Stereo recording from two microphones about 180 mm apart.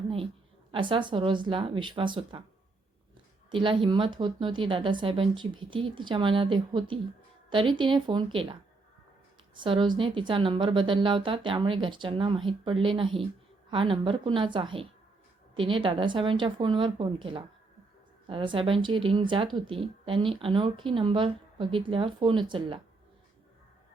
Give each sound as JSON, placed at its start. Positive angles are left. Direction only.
{"t": 0.7, "sound": "speech", "side_deg": -25}
{"t": 3.5, "sound": "speech", "side_deg": -30}
{"t": 9.6, "sound": "speech", "side_deg": -30}